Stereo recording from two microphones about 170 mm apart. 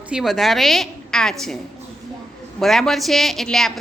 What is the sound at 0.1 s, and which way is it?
A woman's voice, centre (ahead or behind).